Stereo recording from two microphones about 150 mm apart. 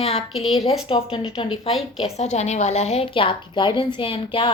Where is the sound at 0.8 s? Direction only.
35° left (ahead or behind).